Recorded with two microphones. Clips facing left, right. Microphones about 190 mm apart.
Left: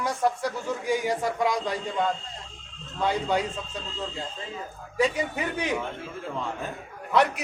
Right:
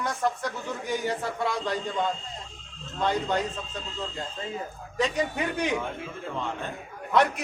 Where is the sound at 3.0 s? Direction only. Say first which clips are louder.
Left 1 dB; 10° left (ahead or behind).